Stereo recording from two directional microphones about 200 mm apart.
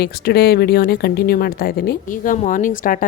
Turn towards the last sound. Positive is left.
turn(degrees=40)  # may be behind; listen again after turning